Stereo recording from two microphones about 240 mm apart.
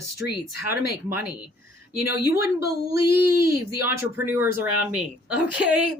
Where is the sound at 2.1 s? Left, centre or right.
Left.